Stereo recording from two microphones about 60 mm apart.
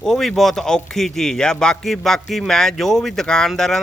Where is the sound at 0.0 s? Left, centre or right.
Centre.